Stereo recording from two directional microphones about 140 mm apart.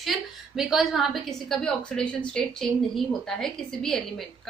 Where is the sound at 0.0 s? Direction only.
Centre (ahead or behind).